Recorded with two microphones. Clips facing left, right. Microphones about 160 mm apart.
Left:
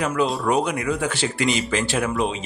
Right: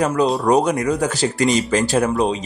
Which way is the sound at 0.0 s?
40° right (ahead or behind).